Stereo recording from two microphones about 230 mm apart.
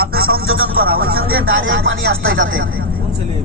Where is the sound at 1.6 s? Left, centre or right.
Right.